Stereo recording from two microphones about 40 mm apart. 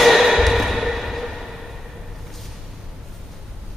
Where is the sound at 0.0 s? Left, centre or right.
Centre.